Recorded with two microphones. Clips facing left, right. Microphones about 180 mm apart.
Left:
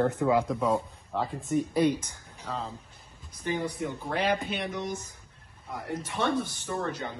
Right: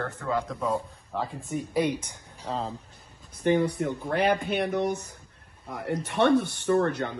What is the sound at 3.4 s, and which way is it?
Speech, 60° right (ahead or behind).